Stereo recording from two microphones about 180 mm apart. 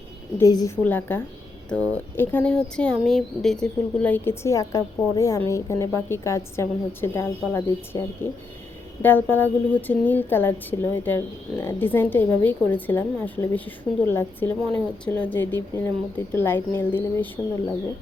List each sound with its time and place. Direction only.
0.3 s a woman's voice: 20° left (ahead or behind)